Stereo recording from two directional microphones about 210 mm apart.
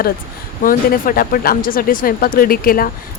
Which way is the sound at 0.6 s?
40° left (ahead or behind).